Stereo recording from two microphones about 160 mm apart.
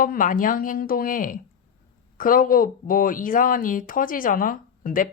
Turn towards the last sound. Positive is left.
turn(degrees=60)  # may be behind; listen again after turning